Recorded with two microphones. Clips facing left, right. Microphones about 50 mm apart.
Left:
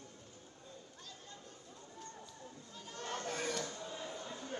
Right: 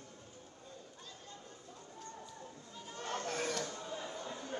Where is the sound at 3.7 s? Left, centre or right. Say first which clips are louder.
Right 2 dB; right.